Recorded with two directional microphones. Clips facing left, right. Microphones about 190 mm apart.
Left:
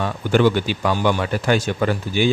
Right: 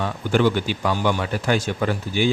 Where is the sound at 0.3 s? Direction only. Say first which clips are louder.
Left 3 dB; 75° left (ahead or behind).